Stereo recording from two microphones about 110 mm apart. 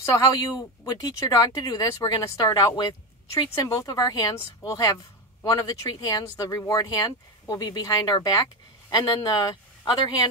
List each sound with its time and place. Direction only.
0.0 s speech: 30° left (ahead or behind)